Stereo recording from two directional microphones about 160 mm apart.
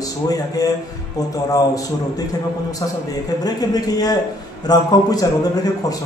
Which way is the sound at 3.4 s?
25° left (ahead or behind).